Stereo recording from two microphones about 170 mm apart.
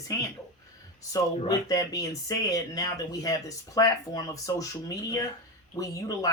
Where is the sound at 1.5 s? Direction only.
20° left (ahead or behind).